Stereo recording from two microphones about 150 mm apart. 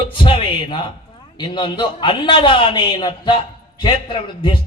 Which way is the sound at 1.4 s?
30° left (ahead or behind).